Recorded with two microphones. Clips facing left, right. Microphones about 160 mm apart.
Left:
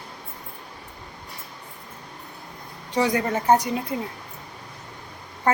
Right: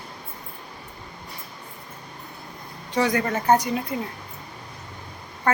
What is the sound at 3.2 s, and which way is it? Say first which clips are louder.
Speech: even; 25° left (ahead or behind).